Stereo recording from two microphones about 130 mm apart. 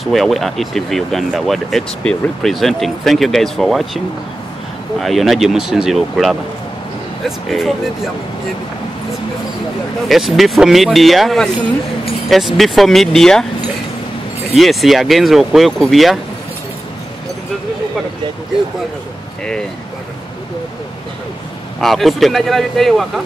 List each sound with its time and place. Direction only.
0.0 s speech: centre (ahead or behind)
5.0 s speech: centre (ahead or behind)
10.0 s speech: centre (ahead or behind)
14.5 s speech: centre (ahead or behind)
21.7 s speech: centre (ahead or behind)